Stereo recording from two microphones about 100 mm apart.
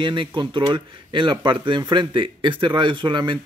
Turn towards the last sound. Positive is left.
turn(degrees=-50)  # may be behind; listen again after turning